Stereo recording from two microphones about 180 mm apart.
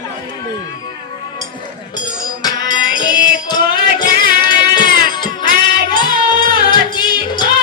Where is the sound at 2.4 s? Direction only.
25° left (ahead or behind).